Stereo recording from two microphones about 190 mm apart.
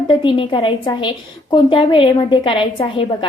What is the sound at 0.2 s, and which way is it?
A woman's voice, 25° left (ahead or behind).